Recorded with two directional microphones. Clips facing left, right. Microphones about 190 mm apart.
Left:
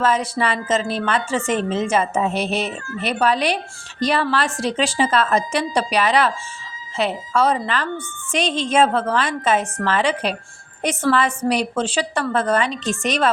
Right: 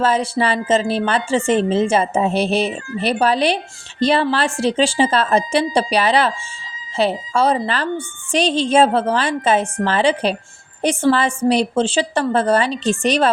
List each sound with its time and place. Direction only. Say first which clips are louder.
0.0 s a woman's voice: right 2 dB; 30° right (ahead or behind)